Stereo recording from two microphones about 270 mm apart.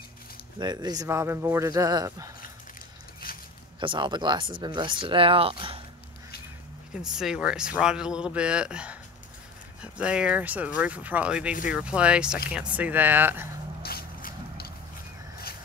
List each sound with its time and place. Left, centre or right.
0.6 s speech: centre
3.2 s a sound: left
3.8 s speech: centre
6.9 s speech: centre
13.8 s vehicle: left